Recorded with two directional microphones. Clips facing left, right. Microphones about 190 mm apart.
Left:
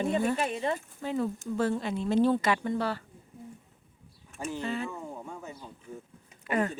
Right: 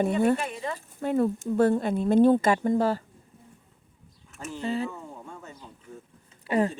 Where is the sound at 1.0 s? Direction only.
55° right (ahead or behind).